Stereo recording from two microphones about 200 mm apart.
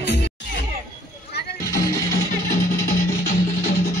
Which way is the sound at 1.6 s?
15° left (ahead or behind).